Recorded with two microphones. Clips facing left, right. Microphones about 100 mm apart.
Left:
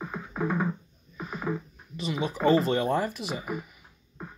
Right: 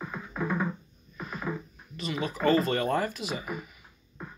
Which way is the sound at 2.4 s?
20° left (ahead or behind).